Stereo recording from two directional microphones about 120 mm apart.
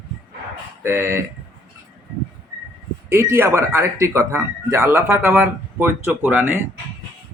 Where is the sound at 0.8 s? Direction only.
20° right (ahead or behind).